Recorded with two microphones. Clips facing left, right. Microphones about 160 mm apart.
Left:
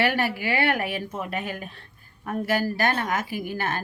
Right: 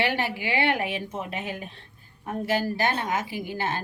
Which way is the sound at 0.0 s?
20° right (ahead or behind).